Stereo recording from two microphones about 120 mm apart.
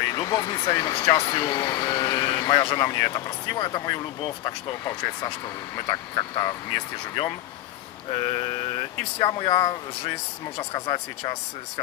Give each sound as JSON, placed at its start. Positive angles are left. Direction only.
{"t": 0.0, "sound": "speech", "side_deg": 35}
{"t": 8.1, "sound": "mantra", "side_deg": 55}
{"t": 9.2, "sound": "speech", "side_deg": 45}